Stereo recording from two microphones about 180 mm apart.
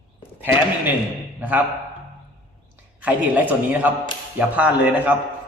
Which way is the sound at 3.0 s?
10° right (ahead or behind).